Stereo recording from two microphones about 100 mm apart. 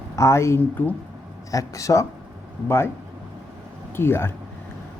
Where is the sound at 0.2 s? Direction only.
30° left (ahead or behind).